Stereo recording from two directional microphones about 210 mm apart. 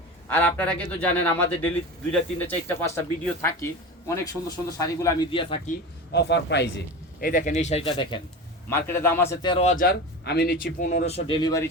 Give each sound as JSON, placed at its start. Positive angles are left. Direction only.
{"t": 0.3, "sound": "speech", "side_deg": 10}
{"t": 6.1, "sound": "a man's voice", "side_deg": 55}
{"t": 7.2, "sound": "speech", "side_deg": 40}
{"t": 8.7, "sound": "speech", "side_deg": 10}
{"t": 9.6, "sound": "speech", "side_deg": 45}